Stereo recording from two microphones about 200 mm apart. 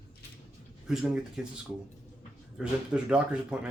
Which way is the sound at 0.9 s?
5° right (ahead or behind).